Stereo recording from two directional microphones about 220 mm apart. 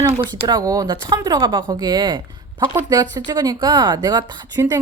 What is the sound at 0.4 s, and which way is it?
Speech, 15° right (ahead or behind).